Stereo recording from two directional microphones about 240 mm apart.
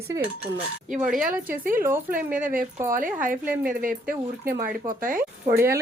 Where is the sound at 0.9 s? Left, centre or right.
Right.